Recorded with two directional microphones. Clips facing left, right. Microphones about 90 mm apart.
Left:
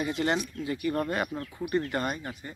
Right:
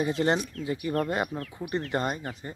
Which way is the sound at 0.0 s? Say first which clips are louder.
Right 3 dB; 30° right (ahead or behind).